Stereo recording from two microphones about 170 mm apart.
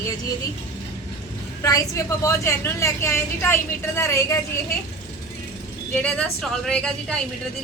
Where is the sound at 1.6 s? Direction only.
20° left (ahead or behind).